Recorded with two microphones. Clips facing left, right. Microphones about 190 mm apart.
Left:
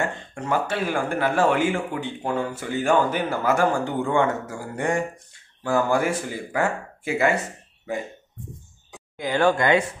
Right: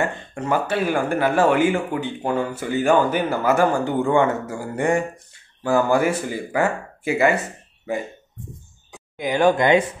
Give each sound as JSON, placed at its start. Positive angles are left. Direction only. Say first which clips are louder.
{"t": 0.0, "sound": "speech", "louder": "right 3 dB", "side_deg": -5}
{"t": 9.1, "sound": "speech", "louder": "right 3 dB", "side_deg": -15}